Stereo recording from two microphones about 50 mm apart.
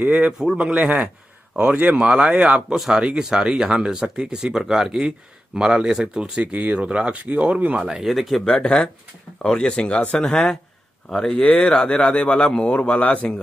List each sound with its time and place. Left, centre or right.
0.0 s speech: right
2.0 s speech: centre
2.3 s speech: right
2.7 s speech: centre
6.5 s speech: right
7.9 s speech: centre
9.4 s a man's voice: centre